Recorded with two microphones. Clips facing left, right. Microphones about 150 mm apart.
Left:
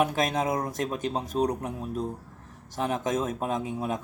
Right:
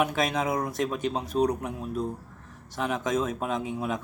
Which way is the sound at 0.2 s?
45° left (ahead or behind).